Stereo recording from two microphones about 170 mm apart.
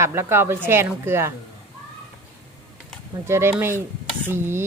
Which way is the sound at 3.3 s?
15° right (ahead or behind).